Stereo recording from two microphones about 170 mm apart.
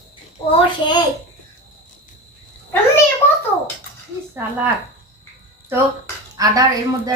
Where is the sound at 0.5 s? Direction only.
25° left (ahead or behind).